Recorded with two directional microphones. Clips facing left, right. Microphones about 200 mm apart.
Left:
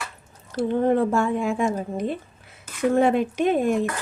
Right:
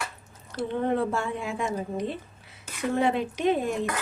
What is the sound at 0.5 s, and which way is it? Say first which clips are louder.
Speech: left 6 dB; 45° left (ahead or behind).